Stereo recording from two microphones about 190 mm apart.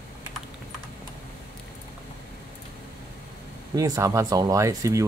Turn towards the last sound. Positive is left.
turn(degrees=-15)  # may be behind; listen again after turning